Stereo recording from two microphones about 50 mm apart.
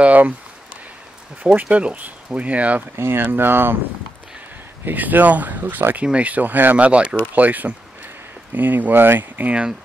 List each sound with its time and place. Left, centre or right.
0.0 s speech: right
1.4 s speech: right
3.0 s speech: right
4.8 s speech: right